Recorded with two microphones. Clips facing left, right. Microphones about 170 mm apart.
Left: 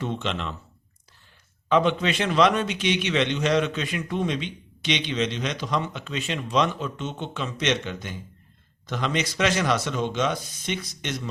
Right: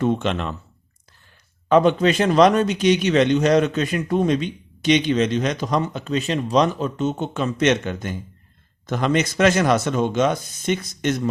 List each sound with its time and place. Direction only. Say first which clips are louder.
0.0 s a man's voice: right 8 dB; 50° right (ahead or behind)
1.7 s a man's voice: right 6 dB; 45° right (ahead or behind)